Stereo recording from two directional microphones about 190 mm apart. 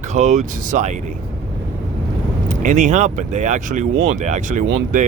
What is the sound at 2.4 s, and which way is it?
Speech, 40° right (ahead or behind).